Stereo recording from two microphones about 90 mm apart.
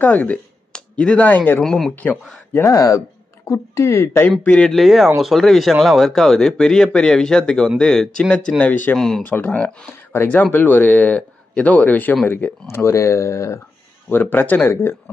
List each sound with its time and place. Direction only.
0.0 s speech: 20° left (ahead or behind)
1.6 s a man's voice: 5° left (ahead or behind)
2.7 s a woman's voice: 40° left (ahead or behind)
4.5 s a man's voice: 10° left (ahead or behind)
8.9 s a man's voice: 5° left (ahead or behind)
9.2 s a woman's voice: 20° left (ahead or behind)
12.6 s speech: 30° left (ahead or behind)
14.0 s a woman's voice: 20° left (ahead or behind)